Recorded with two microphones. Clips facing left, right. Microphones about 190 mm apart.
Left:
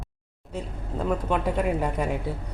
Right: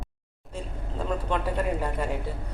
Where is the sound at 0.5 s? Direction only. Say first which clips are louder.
Left 3 dB; 10° left (ahead or behind).